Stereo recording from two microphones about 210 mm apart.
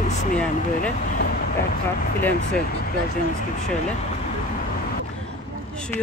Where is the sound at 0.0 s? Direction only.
35° left (ahead or behind).